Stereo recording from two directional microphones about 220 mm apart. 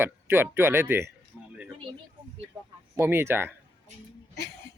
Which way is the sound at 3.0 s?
10° right (ahead or behind).